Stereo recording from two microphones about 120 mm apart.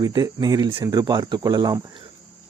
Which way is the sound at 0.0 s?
35° right (ahead or behind).